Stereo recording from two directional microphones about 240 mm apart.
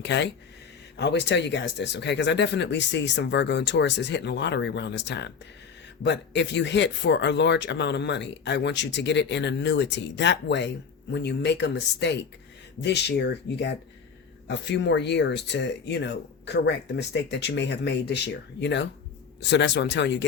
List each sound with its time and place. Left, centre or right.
0.0 s speech: left